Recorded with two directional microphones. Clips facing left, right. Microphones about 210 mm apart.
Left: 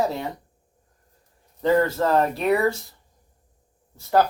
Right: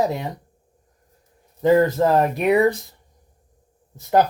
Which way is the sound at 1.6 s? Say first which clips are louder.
Right 4 dB; 15° right (ahead or behind).